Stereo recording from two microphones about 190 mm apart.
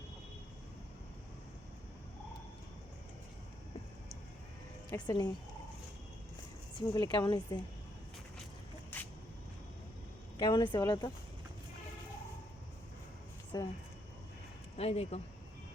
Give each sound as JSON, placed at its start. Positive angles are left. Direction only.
{"t": 4.9, "sound": "a woman's voice", "side_deg": 20}
{"t": 6.7, "sound": "a woman's voice", "side_deg": 20}
{"t": 8.9, "sound": "vehicle", "side_deg": 10}
{"t": 10.3, "sound": "a woman's voice", "side_deg": 20}
{"t": 13.5, "sound": "a woman's voice", "side_deg": 20}
{"t": 14.8, "sound": "speech", "side_deg": 35}